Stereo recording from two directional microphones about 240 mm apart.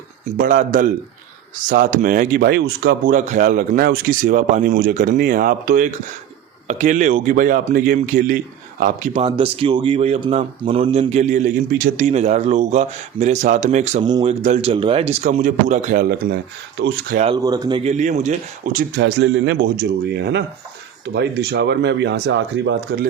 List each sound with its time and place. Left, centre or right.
0.3 s speech: right
9.1 s speech: right
17.2 s speech: centre; by 23.0 s right